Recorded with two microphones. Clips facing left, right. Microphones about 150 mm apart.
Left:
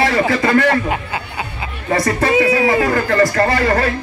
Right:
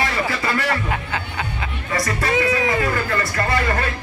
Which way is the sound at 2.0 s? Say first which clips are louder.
Left 5 dB; 30° left (ahead or behind).